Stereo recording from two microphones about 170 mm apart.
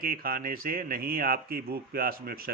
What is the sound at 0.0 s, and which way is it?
Speech, 60° right (ahead or behind).